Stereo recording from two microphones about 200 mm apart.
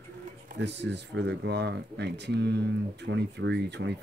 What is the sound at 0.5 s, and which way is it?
Speech, 60° right (ahead or behind).